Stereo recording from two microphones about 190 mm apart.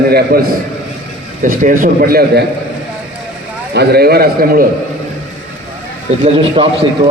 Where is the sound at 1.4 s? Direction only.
45° right (ahead or behind).